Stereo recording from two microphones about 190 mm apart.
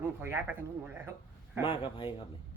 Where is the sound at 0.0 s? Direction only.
15° right (ahead or behind).